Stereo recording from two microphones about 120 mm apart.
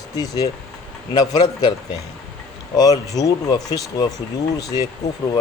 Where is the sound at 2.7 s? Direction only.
35° left (ahead or behind).